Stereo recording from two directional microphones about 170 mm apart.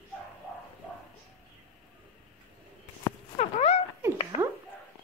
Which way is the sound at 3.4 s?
40° left (ahead or behind).